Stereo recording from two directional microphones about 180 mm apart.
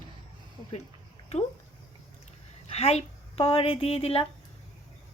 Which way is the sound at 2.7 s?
35° left (ahead or behind).